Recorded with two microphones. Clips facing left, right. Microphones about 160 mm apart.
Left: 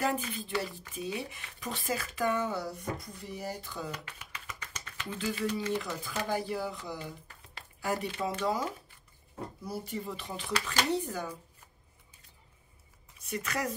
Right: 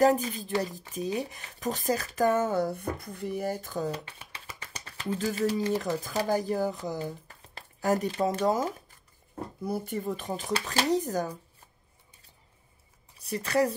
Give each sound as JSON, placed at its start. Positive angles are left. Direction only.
{"t": 0.0, "sound": "speech", "side_deg": -40}
{"t": 3.9, "sound": "speech", "side_deg": -30}
{"t": 13.2, "sound": "speech", "side_deg": -35}